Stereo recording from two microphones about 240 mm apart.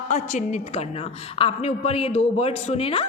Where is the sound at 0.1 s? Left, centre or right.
Left.